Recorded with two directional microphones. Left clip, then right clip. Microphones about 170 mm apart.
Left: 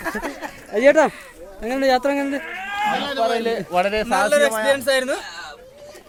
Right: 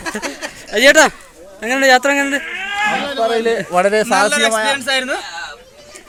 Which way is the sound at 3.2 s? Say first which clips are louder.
Right 6 dB; 40° right (ahead or behind).